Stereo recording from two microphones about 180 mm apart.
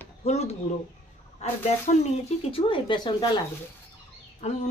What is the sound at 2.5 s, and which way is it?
Speech, 25° left (ahead or behind).